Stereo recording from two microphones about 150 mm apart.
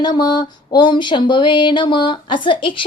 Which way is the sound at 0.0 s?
25° left (ahead or behind).